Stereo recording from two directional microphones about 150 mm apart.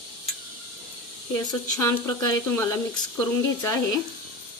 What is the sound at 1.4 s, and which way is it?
A woman's voice, 25° left (ahead or behind).